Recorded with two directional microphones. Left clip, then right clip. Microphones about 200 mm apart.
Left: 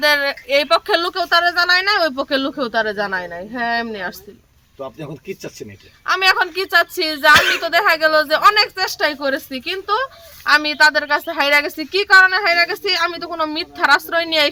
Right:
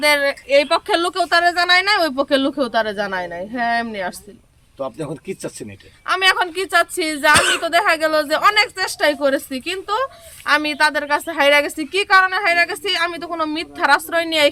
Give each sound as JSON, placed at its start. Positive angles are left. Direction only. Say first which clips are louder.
{"t": 0.0, "sound": "a woman's voice", "louder": "even", "side_deg": -5}
{"t": 4.8, "sound": "speech", "louder": "right 4 dB", "side_deg": -55}
{"t": 6.1, "sound": "a woman's voice", "louder": "left 1 dB", "side_deg": -5}